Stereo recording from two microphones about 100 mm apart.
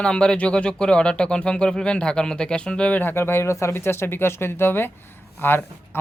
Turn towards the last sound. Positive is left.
turn(degrees=20)  # may be behind; listen again after turning